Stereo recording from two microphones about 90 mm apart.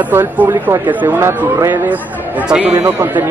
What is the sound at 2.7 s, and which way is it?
Speech, 25° right (ahead or behind).